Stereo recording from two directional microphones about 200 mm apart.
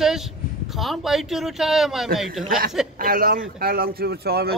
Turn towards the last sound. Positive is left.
turn(degrees=-50)  # may be behind; listen again after turning